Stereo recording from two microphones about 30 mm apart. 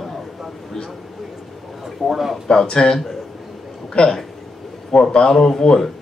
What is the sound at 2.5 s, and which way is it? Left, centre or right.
Speech, left.